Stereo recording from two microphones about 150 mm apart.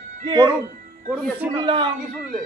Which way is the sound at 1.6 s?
30° right (ahead or behind).